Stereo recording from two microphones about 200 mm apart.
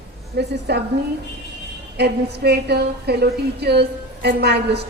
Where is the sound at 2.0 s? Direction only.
55° right (ahead or behind).